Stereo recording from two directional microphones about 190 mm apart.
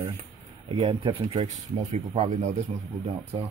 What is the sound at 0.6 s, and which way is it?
Speech, 30° right (ahead or behind).